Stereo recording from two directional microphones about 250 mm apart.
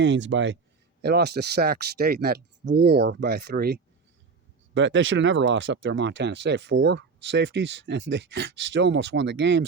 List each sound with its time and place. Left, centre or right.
0.0 s speech: right